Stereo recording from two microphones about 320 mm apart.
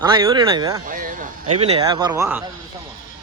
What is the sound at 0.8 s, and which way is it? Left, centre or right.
A man's voice, right.